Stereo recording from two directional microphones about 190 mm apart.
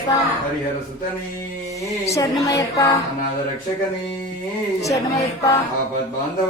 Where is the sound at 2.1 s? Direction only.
15° left (ahead or behind).